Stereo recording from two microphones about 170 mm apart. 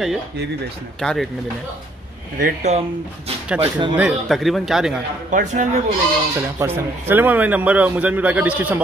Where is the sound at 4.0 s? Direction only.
Centre (ahead or behind).